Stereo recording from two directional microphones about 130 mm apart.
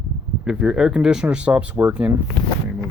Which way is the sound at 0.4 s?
5° right (ahead or behind).